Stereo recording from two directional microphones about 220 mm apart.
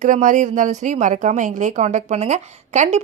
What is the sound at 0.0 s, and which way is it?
A woman's voice, 35° right (ahead or behind).